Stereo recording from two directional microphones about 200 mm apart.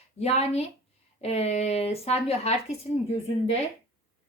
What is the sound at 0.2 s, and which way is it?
A woman's voice, 30° left (ahead or behind).